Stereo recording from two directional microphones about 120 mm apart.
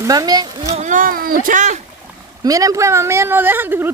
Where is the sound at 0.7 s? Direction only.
90° right.